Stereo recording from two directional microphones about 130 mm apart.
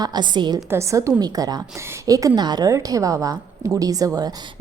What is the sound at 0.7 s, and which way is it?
A woman's voice, 20° right (ahead or behind).